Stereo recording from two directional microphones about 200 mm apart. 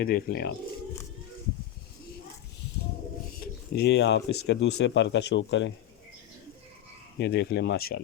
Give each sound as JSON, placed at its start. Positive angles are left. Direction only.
{"t": 0.0, "sound": "speech", "side_deg": 50}
{"t": 3.4, "sound": "speech", "side_deg": 55}
{"t": 7.2, "sound": "speech", "side_deg": 55}